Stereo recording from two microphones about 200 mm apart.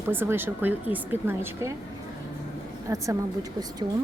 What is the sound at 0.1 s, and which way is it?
Speech, 10° right (ahead or behind).